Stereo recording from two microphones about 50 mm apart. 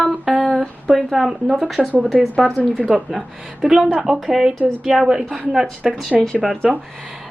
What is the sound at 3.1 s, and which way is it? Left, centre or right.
A woman's voice, centre.